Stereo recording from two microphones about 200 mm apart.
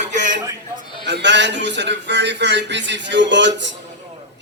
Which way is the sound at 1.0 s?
60° right (ahead or behind).